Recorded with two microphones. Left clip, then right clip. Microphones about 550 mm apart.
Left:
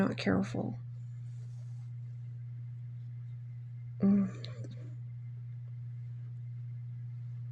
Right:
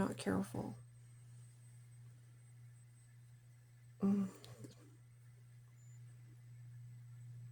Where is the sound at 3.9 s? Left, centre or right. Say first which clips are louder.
Left 8 dB; right.